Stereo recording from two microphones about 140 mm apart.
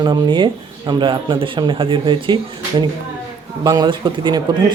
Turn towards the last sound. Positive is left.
turn(degrees=-35)  # may be behind; listen again after turning